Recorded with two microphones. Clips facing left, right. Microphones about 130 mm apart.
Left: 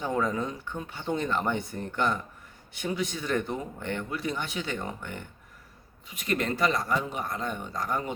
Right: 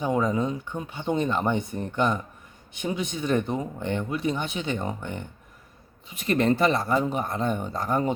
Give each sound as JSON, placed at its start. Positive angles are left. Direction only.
{"t": 0.0, "sound": "speech", "side_deg": -15}
{"t": 6.1, "sound": "speech", "side_deg": -30}